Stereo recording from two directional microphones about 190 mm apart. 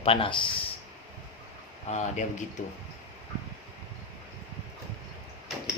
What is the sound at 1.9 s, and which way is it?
Speech, 40° left (ahead or behind).